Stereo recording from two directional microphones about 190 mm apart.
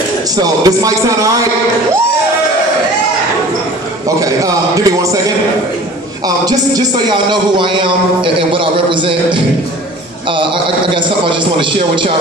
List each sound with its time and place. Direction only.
0.4 s a man's voice: 20° right (ahead or behind)
4.2 s a man's voice: 15° right (ahead or behind)
6.2 s a man's voice: 20° right (ahead or behind)
11.0 s a man's voice: 25° right (ahead or behind)